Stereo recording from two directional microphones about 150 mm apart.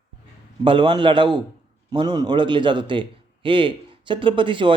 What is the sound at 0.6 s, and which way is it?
A man's voice, 35° right (ahead or behind).